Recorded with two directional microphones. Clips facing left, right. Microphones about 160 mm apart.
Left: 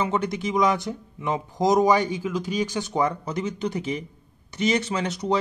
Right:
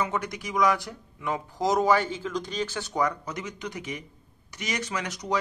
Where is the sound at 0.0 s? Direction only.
25° left (ahead or behind).